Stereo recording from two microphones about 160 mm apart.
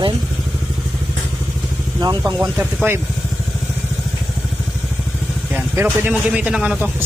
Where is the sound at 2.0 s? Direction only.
25° right (ahead or behind).